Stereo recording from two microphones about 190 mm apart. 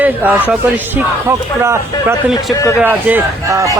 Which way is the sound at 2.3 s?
20° left (ahead or behind).